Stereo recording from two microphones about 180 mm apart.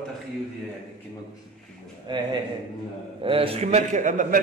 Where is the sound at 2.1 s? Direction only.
25° right (ahead or behind).